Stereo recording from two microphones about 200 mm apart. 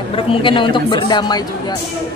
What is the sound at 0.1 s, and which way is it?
Speech, 25° left (ahead or behind).